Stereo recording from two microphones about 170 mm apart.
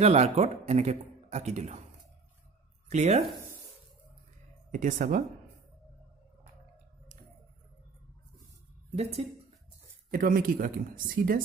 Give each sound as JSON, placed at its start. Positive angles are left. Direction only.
{"t": 0.0, "sound": "a man's voice", "side_deg": -40}
{"t": 2.9, "sound": "a man's voice", "side_deg": -40}
{"t": 4.6, "sound": "speech", "side_deg": -50}
{"t": 8.9, "sound": "a man's voice", "side_deg": -40}
{"t": 10.1, "sound": "speech", "side_deg": -55}